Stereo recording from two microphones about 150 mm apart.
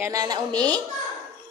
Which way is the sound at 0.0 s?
25° right (ahead or behind).